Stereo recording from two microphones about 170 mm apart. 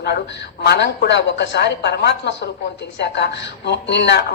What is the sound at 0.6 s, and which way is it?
A man's voice, 80° left.